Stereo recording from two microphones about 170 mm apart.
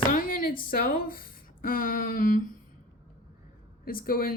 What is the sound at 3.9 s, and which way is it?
Speech, 60° left (ahead or behind).